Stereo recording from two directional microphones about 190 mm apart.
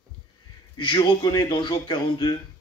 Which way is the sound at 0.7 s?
25° left (ahead or behind).